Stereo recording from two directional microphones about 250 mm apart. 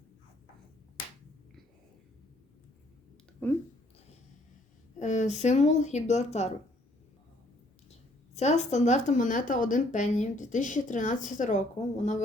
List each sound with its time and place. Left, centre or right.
3.4 s a sound: centre
4.9 s a woman's voice: left
8.4 s speech: left